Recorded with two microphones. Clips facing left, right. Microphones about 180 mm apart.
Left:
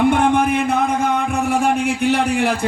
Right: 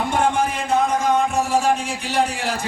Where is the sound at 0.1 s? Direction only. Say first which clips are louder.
Left 5 dB; 60° left (ahead or behind).